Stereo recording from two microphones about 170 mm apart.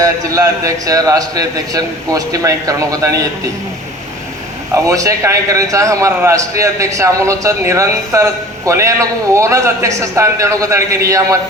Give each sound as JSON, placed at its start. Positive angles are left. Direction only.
{"t": 0.0, "sound": "a man's voice", "side_deg": -20}
{"t": 4.7, "sound": "a man's voice", "side_deg": -20}